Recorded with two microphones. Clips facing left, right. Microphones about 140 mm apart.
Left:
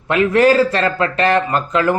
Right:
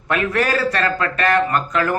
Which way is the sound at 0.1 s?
20° left (ahead or behind).